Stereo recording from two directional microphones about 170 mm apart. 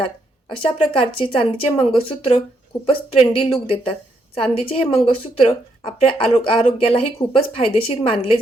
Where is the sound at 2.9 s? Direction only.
35° left (ahead or behind).